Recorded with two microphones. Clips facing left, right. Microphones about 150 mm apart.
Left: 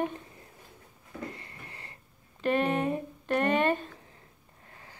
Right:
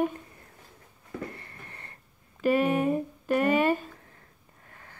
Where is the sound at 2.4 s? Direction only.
10° right (ahead or behind).